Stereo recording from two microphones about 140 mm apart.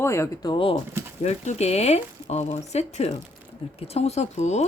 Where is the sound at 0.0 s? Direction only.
20° left (ahead or behind); by 0.8 s 40° left (ahead or behind).